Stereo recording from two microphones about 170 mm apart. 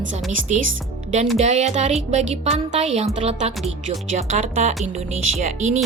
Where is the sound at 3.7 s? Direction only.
45° right (ahead or behind).